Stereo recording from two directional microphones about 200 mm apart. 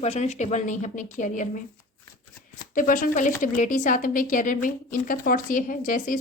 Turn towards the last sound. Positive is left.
turn(degrees=40)  # may be behind; listen again after turning